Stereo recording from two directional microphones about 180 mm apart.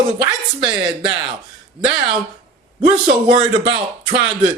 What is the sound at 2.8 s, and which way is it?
Speech, 25° right (ahead or behind).